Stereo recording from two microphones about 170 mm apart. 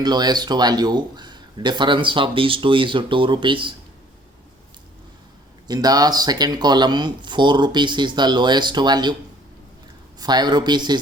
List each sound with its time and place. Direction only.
0.0 s speech: 25° right (ahead or behind)
5.6 s speech: 25° right (ahead or behind)
10.2 s speech: 25° right (ahead or behind)